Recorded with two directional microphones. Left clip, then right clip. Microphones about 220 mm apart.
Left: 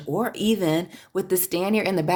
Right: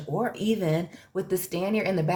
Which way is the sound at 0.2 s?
50° left (ahead or behind).